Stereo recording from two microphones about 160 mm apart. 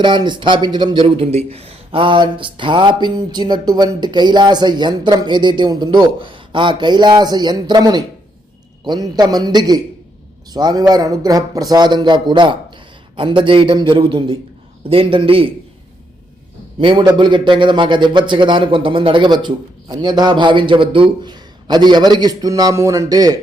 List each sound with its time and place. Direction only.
0.0 s a man's voice: 30° right (ahead or behind)
16.8 s a man's voice: 30° right (ahead or behind)